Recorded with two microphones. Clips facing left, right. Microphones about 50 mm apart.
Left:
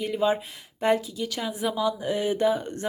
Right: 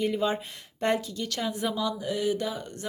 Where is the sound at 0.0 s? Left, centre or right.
Centre.